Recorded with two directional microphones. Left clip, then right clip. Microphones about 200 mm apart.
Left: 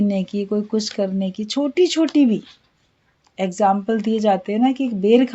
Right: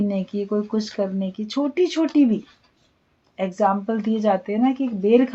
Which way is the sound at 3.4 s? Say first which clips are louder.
Left 3 dB; 50° left (ahead or behind).